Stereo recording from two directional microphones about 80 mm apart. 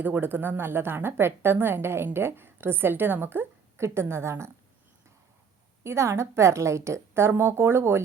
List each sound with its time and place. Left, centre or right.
0.0 s a woman's voice: right
5.8 s a woman's voice: right